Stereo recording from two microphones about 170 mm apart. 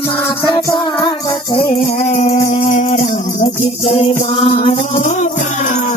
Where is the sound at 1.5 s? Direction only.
35° left (ahead or behind).